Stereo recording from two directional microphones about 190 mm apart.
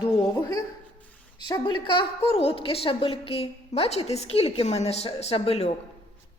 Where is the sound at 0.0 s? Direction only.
20° left (ahead or behind).